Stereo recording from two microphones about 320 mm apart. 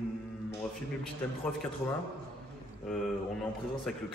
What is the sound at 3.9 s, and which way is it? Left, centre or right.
Speech, centre.